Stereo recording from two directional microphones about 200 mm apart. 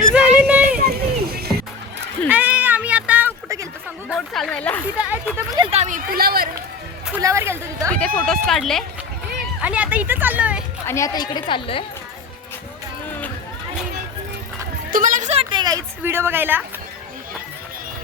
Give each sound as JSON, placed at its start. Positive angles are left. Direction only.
{"t": 0.0, "sound": "child singing", "side_deg": -5}
{"t": 0.3, "sound": "a sound", "side_deg": -5}
{"t": 0.9, "sound": "music", "side_deg": -50}
{"t": 2.3, "sound": "cat", "side_deg": -10}
{"t": 4.1, "sound": "speech", "side_deg": 0}
{"t": 5.7, "sound": "a sound", "side_deg": -40}
{"t": 7.2, "sound": "a woman's voice", "side_deg": -15}
{"t": 7.9, "sound": "speech", "side_deg": 5}
{"t": 10.8, "sound": "a woman's voice", "side_deg": 15}
{"t": 14.8, "sound": "a woman's voice", "side_deg": -45}